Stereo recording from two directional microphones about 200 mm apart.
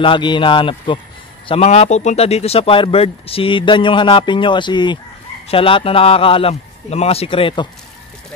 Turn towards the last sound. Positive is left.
turn(degrees=25)  # may be behind; listen again after turning